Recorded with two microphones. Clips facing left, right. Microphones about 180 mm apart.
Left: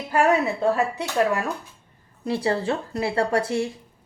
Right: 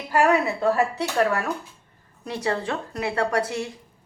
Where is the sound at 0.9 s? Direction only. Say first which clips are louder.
Even; 20° left (ahead or behind).